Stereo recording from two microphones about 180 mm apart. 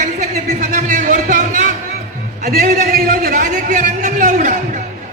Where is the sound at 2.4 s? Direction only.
50° right (ahead or behind).